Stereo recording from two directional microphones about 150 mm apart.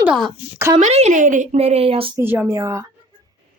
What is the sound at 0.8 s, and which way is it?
Speech, 50° right (ahead or behind).